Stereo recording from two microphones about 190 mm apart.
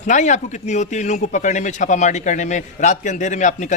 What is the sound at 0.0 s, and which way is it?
A man's voice, 40° left (ahead or behind).